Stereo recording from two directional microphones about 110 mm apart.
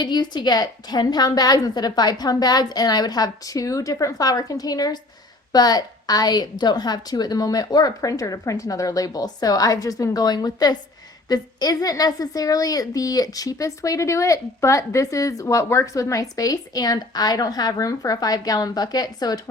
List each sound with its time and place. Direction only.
0.0 s a woman's voice: 40° left (ahead or behind)